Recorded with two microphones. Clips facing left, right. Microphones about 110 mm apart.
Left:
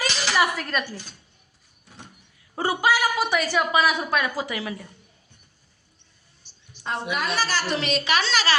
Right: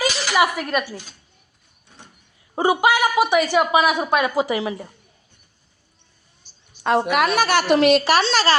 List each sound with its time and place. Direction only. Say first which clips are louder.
0.0 s a sound: right 4 dB; 5° right (ahead or behind)
0.4 s speech: right 4 dB; 15° right (ahead or behind)
2.6 s a woman's voice: right 5 dB; 20° right (ahead or behind)
7.1 s a woman's voice: right 8 dB; 65° right (ahead or behind)
8.1 s a woman's voice: right 5 dB; 35° right (ahead or behind)